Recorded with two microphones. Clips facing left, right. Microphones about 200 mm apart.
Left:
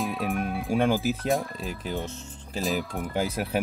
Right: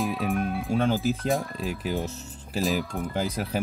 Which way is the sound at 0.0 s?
Centre (ahead or behind).